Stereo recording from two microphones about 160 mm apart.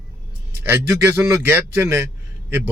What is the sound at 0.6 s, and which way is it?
Speech, 15° right (ahead or behind).